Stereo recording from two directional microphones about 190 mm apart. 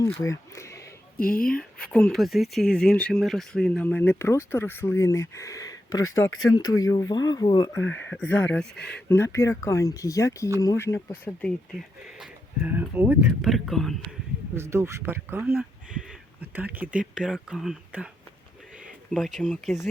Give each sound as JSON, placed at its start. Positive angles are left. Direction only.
{"t": 0.0, "sound": "speech", "side_deg": 15}
{"t": 1.1, "sound": "speech", "side_deg": 50}
{"t": 1.5, "sound": "speech", "side_deg": 5}
{"t": 12.0, "sound": "speech", "side_deg": -5}
{"t": 14.5, "sound": "speech", "side_deg": -15}
{"t": 19.1, "sound": "speech", "side_deg": 5}